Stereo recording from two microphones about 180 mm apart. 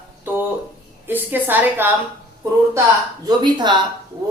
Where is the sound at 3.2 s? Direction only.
25° right (ahead or behind).